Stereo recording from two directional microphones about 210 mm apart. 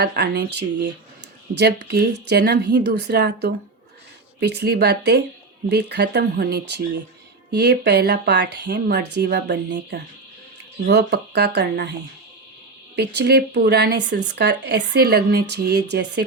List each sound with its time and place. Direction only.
0.0 s speech: 55° right (ahead or behind)
13.0 s speech: 55° right (ahead or behind)